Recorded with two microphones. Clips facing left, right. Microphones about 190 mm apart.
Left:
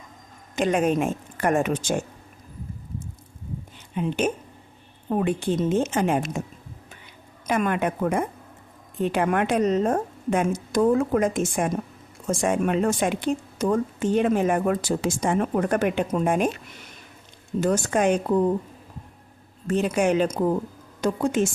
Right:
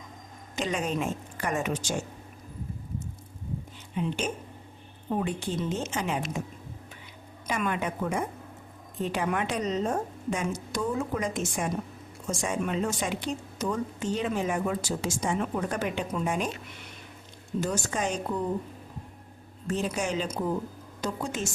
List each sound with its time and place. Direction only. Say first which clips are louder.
0.5 s speech: left 8 dB; 55° left (ahead or behind)
4.0 s speech: left 4 dB; 55° left (ahead or behind)
5.1 s speech: left 6 dB; 55° left (ahead or behind)
7.4 s speech: left 6 dB; 50° left (ahead or behind)
17.6 s speech: left 8 dB; 55° left (ahead or behind)
19.6 s speech: left 8 dB; 60° left (ahead or behind)